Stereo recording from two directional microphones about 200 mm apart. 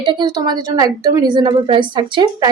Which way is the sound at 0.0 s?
25° right (ahead or behind).